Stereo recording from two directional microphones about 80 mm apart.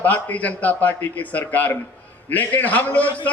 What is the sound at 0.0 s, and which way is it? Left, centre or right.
A man's voice, centre.